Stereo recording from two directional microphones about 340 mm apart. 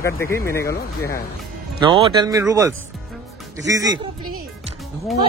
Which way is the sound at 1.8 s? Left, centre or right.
Centre.